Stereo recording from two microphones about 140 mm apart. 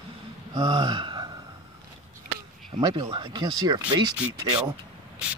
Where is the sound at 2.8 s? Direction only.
35° right (ahead or behind).